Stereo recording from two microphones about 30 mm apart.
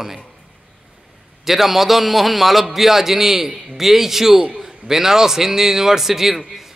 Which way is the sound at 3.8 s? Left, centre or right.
Centre.